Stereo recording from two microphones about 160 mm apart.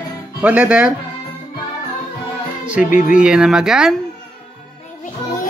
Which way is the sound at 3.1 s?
5° right (ahead or behind).